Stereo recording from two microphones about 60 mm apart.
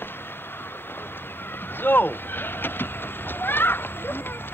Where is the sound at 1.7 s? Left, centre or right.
Left.